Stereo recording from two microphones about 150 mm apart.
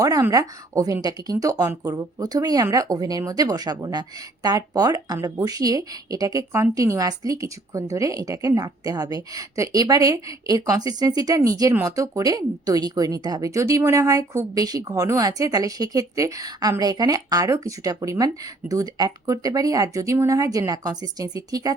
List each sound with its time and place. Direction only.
0.0 s speech: 20° right (ahead or behind)